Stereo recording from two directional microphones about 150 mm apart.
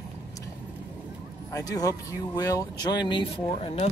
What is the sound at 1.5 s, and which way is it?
Speech, 25° left (ahead or behind).